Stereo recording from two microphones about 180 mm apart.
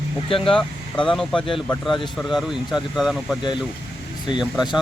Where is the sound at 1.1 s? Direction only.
Centre (ahead or behind).